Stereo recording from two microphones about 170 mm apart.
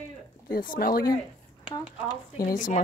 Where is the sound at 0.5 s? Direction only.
60° left (ahead or behind).